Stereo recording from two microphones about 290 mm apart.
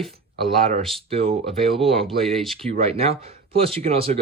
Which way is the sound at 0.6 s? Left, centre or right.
Right.